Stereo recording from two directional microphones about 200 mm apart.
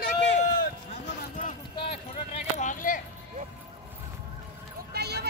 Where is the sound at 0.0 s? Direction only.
50° left (ahead or behind).